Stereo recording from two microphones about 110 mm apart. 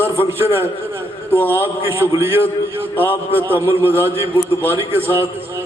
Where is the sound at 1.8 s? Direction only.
20° right (ahead or behind).